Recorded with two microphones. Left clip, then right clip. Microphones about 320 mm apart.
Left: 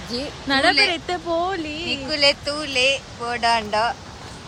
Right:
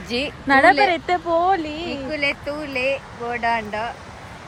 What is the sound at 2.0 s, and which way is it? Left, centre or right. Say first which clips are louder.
Speech: left 5 dB; centre.